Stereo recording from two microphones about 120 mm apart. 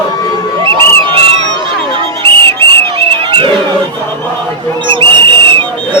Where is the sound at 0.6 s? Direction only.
20° left (ahead or behind).